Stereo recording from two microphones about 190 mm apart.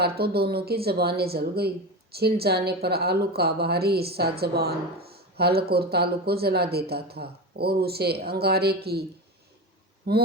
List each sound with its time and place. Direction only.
0.0 s a woman's voice: 55° right (ahead or behind)
10.1 s a woman's voice: 55° right (ahead or behind)